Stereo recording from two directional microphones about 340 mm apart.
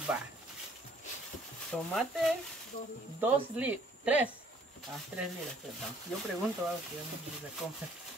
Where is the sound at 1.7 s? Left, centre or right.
Centre.